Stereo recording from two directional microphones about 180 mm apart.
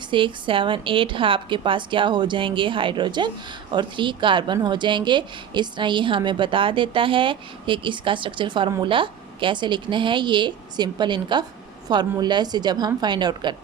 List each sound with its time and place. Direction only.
0.1 s a woman's voice: 25° right (ahead or behind)